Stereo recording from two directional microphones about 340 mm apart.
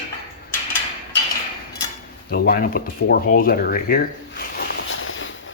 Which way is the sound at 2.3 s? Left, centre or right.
Left.